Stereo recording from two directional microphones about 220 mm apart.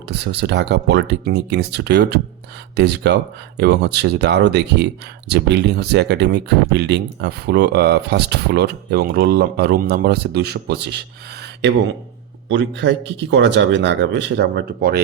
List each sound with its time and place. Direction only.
0.1 s speech: 50° right (ahead or behind)
12.5 s speech: 55° right (ahead or behind)